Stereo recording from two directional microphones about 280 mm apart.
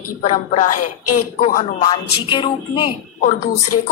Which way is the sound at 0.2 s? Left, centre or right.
Left.